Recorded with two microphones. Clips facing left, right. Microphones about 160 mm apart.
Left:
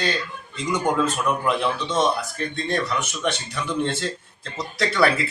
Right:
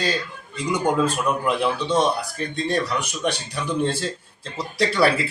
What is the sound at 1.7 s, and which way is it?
Speech, 35° right (ahead or behind).